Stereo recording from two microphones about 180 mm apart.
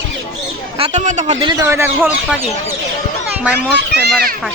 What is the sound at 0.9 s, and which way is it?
Speech, 40° right (ahead or behind).